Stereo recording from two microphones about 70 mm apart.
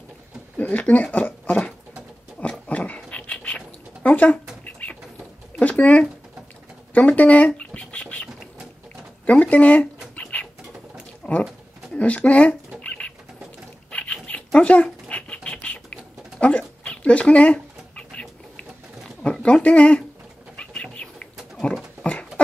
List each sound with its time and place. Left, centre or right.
0.6 s speech: left
1.1 s a sound: left
2.7 s a sound: centre
6.9 s scratch: left
9.2 s speech: left
10.1 s bird: left
11.2 s pigeon: centre
11.9 s bird: centre
13.8 s a sound: centre
19.2 s speech: centre
20.5 s bird: centre
22.0 s a sound: centre